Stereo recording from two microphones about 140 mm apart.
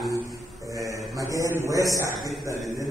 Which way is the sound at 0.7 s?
25° right (ahead or behind).